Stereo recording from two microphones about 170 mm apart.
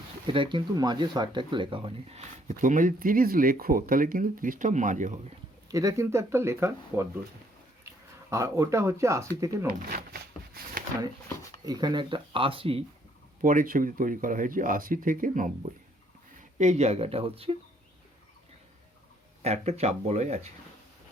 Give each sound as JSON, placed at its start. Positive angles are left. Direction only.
{"t": 0.3, "sound": "speech", "side_deg": -30}
{"t": 2.5, "sound": "speech", "side_deg": -50}
{"t": 5.7, "sound": "speech", "side_deg": -20}
{"t": 8.3, "sound": "speech", "side_deg": -15}
{"t": 10.1, "sound": "a sound", "side_deg": -60}
{"t": 11.6, "sound": "speech", "side_deg": -25}
{"t": 13.4, "sound": "speech", "side_deg": -55}
{"t": 19.4, "sound": "speech", "side_deg": -40}